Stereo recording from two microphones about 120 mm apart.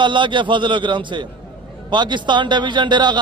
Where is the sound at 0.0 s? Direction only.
40° right (ahead or behind).